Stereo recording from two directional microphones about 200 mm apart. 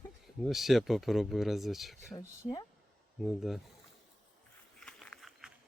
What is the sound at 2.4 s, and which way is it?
Speech, 20° left (ahead or behind).